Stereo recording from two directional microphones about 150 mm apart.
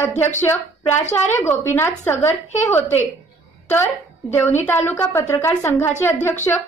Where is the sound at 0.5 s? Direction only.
15° left (ahead or behind).